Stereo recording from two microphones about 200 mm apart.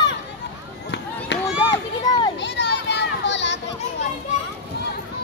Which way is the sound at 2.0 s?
20° left (ahead or behind).